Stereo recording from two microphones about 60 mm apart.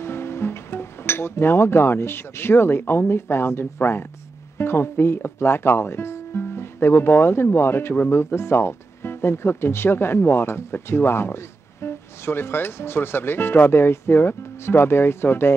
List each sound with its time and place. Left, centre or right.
0.0 s speech: left